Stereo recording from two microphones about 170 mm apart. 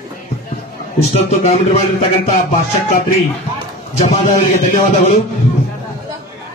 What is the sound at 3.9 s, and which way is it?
A man's voice, 45° left (ahead or behind).